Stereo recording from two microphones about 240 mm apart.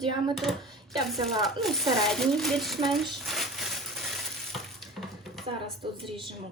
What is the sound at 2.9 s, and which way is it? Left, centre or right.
Frying, centre.